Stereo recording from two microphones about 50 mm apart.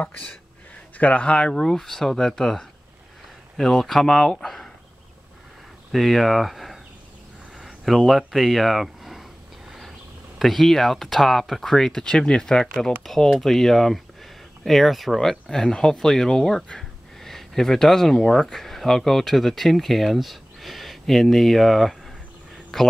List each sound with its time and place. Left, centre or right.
0.0 s speech: left
1.5 s speech: centre
5.9 s speech: centre
9.7 s a sound: centre
10.4 s speech: centre